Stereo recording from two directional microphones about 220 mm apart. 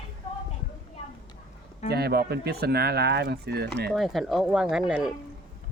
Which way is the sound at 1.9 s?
45° right (ahead or behind).